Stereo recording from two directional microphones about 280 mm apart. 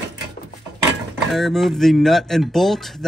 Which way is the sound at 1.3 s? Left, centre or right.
Centre.